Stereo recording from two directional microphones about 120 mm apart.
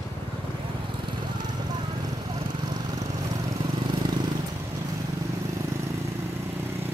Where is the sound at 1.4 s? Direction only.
35° right (ahead or behind).